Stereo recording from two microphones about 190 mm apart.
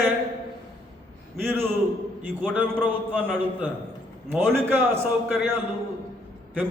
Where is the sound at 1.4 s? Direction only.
10° right (ahead or behind).